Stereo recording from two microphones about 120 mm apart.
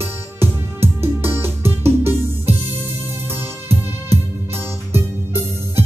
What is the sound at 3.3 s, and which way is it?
Music, 20° right (ahead or behind).